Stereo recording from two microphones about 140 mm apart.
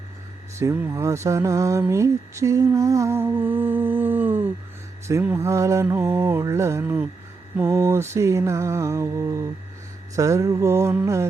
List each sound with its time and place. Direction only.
0.6 s lullaby: 15° right (ahead or behind)
1.0 s mantra: 20° right (ahead or behind)
1.8 s lullaby: 20° right (ahead or behind)
7.7 s mantra: 25° right (ahead or behind)